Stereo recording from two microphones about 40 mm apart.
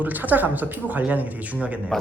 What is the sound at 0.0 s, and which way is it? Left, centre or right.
Speech, right.